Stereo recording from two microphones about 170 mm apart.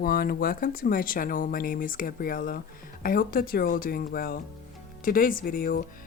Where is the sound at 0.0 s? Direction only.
60° left (ahead or behind).